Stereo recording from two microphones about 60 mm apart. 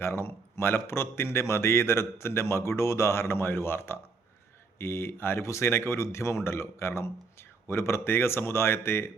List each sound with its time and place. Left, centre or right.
0.0 s speech: left